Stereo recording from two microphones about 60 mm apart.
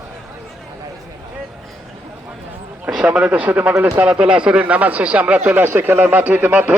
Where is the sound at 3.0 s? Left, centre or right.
Right.